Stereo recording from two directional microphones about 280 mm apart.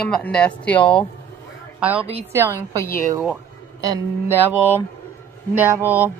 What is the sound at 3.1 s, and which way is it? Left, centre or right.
Speech, centre.